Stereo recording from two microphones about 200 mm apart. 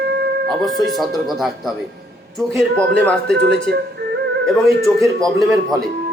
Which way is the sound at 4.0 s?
55° right (ahead or behind).